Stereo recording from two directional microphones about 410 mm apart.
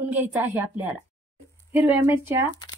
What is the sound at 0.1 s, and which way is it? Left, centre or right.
A woman's voice, centre.